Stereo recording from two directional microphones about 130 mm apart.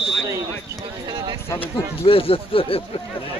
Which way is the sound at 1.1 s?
35° right (ahead or behind).